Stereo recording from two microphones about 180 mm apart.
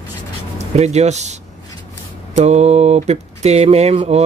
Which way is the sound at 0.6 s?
40° right (ahead or behind).